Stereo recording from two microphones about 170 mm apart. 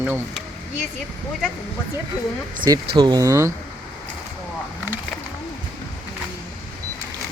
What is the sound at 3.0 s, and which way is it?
Speech, 20° right (ahead or behind).